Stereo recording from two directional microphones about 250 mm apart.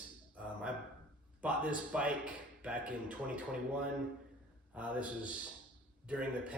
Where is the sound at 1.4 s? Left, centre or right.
Centre.